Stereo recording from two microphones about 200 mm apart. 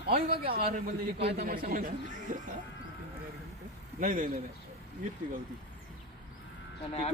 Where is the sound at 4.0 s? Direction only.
40° right (ahead or behind).